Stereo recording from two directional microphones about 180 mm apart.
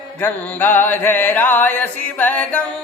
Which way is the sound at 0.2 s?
10° left (ahead or behind).